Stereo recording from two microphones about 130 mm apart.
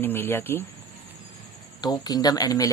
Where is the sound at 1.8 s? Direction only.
30° left (ahead or behind).